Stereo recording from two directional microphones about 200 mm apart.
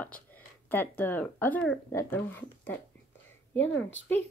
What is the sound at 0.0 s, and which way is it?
Speech, 10° left (ahead or behind).